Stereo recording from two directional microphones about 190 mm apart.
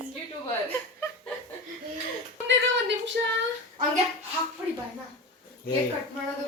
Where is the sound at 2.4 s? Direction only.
70° right (ahead or behind).